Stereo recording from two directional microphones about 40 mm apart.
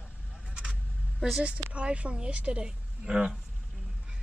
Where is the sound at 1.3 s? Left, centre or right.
Right.